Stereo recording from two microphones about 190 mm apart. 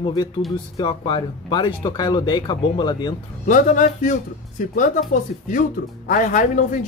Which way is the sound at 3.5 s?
40° left (ahead or behind).